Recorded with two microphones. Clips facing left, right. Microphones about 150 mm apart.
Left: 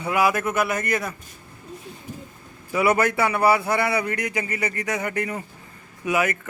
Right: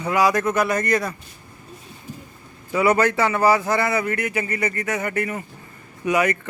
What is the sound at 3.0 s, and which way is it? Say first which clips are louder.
Speech: right 2 dB; 15° left (ahead or behind).